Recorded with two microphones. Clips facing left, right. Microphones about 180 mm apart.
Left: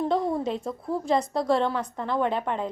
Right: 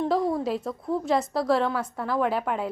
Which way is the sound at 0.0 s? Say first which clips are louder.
Right 1 dB; centre (ahead or behind).